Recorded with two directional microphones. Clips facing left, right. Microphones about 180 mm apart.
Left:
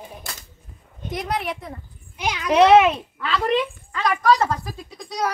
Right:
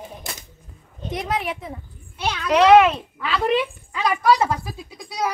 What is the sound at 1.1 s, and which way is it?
Speech, centre (ahead or behind).